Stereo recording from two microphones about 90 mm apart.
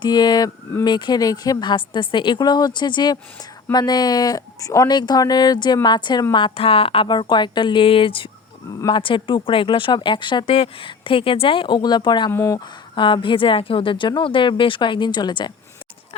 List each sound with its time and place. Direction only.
0.0 s speech: 50° left (ahead or behind)
1.6 s a woman's voice: 60° left (ahead or behind); by 4.9 s 40° left (ahead or behind)
4.9 s speech: 50° left (ahead or behind)
6.3 s speech: 75° left (ahead or behind); by 12.3 s 55° left (ahead or behind)
12.3 s speech: 25° left (ahead or behind)
12.5 s a woman's voice: 60° left (ahead or behind)